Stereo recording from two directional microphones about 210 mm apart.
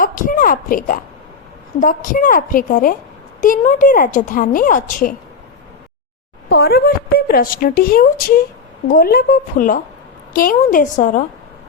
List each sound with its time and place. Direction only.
0.0 s a woman's voice: 40° left (ahead or behind)
6.5 s a woman's voice: 50° left (ahead or behind)